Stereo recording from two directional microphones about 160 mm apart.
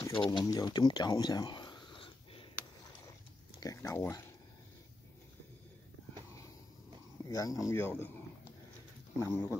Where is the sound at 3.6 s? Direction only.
20° left (ahead or behind).